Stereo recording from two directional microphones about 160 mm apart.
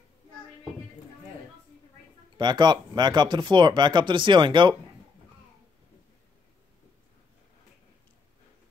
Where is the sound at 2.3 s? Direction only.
25° right (ahead or behind).